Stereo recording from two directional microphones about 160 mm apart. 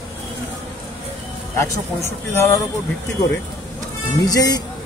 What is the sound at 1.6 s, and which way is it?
Speech, 15° left (ahead or behind).